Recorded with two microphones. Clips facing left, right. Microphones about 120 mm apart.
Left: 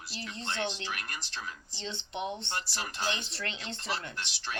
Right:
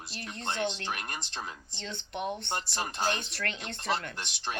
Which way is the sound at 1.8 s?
25° left (ahead or behind).